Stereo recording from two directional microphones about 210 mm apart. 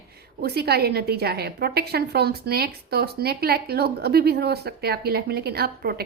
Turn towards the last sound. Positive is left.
turn(degrees=-45)  # may be behind; listen again after turning